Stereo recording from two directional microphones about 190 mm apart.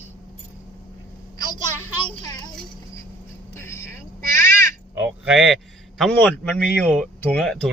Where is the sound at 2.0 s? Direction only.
20° left (ahead or behind).